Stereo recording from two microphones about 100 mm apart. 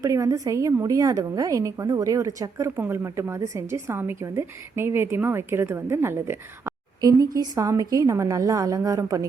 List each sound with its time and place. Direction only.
0.0 s a woman's voice: 35° right (ahead or behind)
7.0 s a woman's voice: 35° right (ahead or behind)